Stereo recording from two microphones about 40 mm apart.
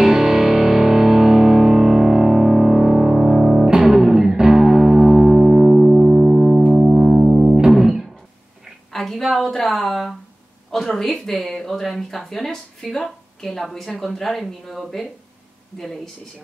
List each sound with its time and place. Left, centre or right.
0.0 s music: centre
8.9 s a sound: centre
12.4 s a woman's voice: centre